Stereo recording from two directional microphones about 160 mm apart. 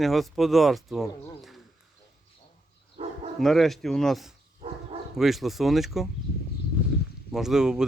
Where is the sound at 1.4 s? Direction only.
Centre (ahead or behind).